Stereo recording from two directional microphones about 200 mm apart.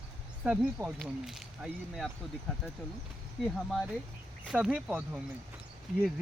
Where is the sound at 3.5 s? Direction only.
Centre (ahead or behind).